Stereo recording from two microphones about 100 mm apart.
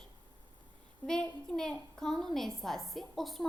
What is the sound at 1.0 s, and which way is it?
A woman's voice, 5° left (ahead or behind).